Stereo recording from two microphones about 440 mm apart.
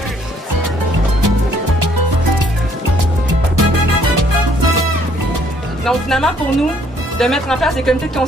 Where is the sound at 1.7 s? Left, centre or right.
Right.